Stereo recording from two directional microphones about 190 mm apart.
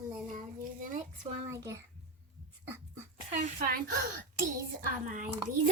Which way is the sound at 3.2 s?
45° right (ahead or behind).